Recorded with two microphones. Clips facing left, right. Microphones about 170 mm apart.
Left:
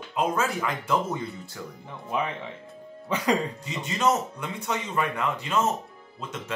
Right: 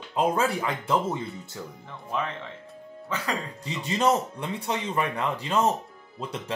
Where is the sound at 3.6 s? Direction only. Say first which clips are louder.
Right 3 dB; 35° right (ahead or behind).